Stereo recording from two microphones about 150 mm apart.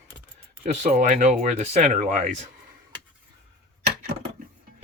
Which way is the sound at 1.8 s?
60° right (ahead or behind).